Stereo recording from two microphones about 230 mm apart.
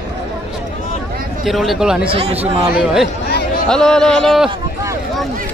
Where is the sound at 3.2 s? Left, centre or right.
Left.